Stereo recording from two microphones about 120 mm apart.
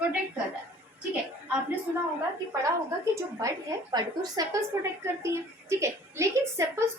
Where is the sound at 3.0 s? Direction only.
25° right (ahead or behind).